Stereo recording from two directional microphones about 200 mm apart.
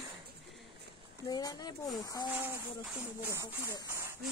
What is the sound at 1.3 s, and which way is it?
Speech, 20° left (ahead or behind).